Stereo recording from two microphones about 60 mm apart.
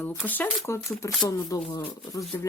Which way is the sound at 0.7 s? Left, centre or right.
Left.